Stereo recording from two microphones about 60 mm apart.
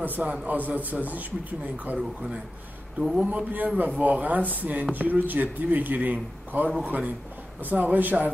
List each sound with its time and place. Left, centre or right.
0.0 s a man's voice: right
3.0 s speech: centre
3.3 s a man's voice: right